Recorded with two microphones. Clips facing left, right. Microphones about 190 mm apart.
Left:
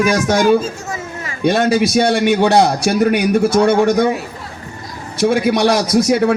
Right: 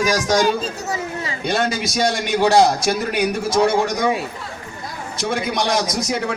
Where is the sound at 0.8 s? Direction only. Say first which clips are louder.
Right 1 dB; 20° right (ahead or behind).